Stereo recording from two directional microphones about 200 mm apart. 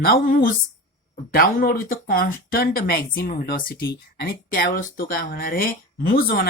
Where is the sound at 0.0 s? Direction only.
50° left (ahead or behind).